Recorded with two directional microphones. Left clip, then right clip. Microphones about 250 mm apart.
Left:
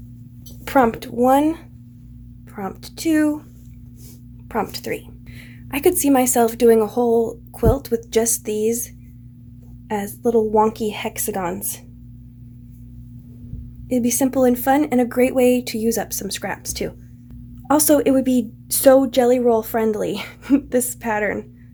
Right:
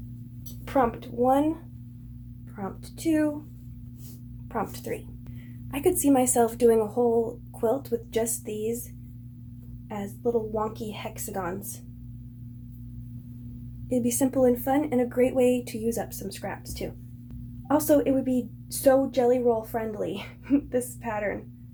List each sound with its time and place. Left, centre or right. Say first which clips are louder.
0.6 s speech: left 8 dB; left
4.5 s speech: left 7 dB; left
9.9 s a woman's voice: left 9 dB; left
13.9 s a woman's voice: left 6 dB; left